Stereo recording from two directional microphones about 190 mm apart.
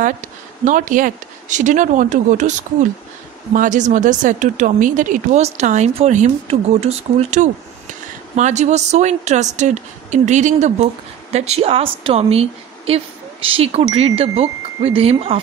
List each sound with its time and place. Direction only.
0.7 s speech: 45° right (ahead or behind)
3.5 s speech: 40° right (ahead or behind)